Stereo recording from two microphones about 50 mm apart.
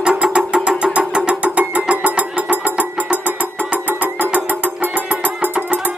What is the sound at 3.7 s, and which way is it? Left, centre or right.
Music, right.